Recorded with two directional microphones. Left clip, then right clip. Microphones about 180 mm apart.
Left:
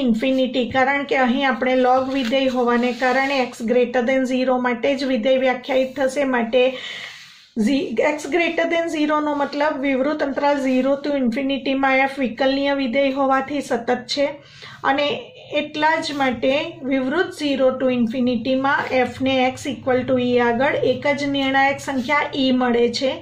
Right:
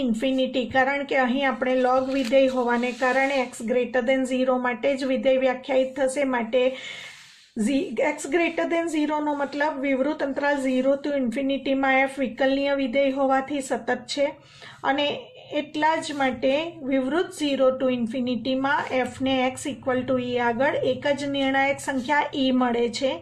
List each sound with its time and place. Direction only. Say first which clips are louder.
0.2 s a woman's voice: left 4 dB; 35° right (ahead or behind)
3.6 s a woman's voice: left 5 dB; 35° right (ahead or behind)
13.7 s a woman's voice: left 5 dB; 35° right (ahead or behind)
16.0 s a woman's voice: left 4 dB; 35° right (ahead or behind)